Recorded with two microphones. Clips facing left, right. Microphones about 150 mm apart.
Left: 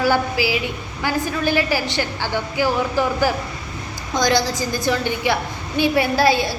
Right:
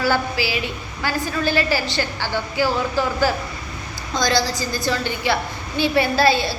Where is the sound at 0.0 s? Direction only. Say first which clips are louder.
Left 2 dB; 15° left (ahead or behind).